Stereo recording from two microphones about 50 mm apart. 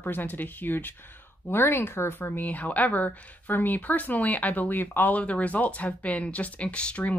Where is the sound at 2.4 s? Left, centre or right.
Left.